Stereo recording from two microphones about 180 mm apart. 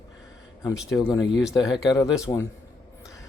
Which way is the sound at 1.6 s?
5° right (ahead or behind).